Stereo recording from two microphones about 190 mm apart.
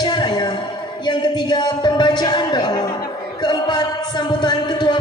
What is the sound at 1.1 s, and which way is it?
Speech, 25° left (ahead or behind).